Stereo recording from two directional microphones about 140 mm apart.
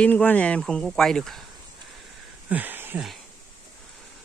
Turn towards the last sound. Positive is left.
turn(degrees=-15)  # may be behind; listen again after turning